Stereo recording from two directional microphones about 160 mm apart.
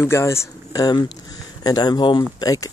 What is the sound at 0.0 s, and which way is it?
Speech, 15° left (ahead or behind).